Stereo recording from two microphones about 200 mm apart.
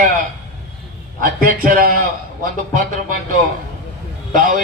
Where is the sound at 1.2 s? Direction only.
40° right (ahead or behind).